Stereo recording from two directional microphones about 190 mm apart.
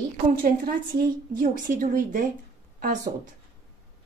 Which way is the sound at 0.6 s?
50° right (ahead or behind).